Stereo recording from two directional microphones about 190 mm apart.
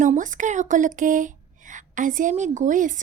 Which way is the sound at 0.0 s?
40° right (ahead or behind).